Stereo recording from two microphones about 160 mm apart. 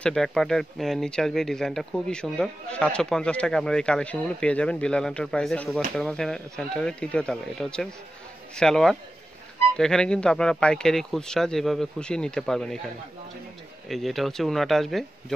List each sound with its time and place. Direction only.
0.0 s speech: 5° left (ahead or behind)
13.8 s speech: centre (ahead or behind)